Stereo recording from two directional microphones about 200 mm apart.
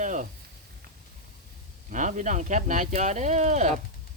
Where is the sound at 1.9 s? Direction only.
40° right (ahead or behind).